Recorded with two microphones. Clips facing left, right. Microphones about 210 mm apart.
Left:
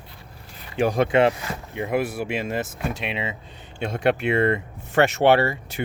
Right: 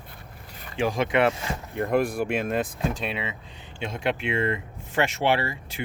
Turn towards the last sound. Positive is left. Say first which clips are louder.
# left 7 dB
turn(degrees=65)  # may be behind; listen again after turning